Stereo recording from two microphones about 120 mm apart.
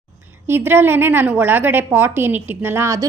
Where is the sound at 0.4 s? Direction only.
15° right (ahead or behind).